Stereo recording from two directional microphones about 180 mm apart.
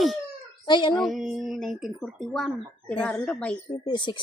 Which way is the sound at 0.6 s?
25° left (ahead or behind).